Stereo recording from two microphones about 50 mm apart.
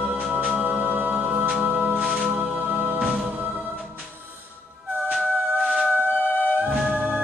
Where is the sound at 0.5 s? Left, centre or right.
Right.